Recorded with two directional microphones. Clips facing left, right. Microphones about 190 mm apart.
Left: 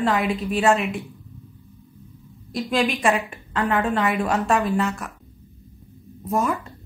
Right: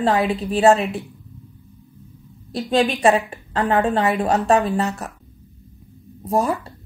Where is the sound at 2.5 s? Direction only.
35° right (ahead or behind).